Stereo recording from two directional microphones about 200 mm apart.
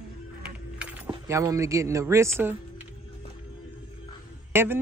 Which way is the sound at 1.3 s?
15° right (ahead or behind).